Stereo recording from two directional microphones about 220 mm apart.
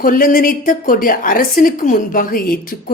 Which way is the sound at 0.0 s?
40° left (ahead or behind).